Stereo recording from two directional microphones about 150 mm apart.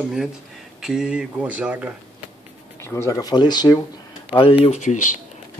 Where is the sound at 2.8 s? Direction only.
20° left (ahead or behind).